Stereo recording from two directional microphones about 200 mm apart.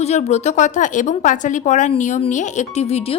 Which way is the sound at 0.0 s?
35° left (ahead or behind).